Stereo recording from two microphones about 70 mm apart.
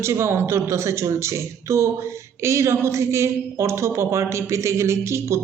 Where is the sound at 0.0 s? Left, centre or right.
Right.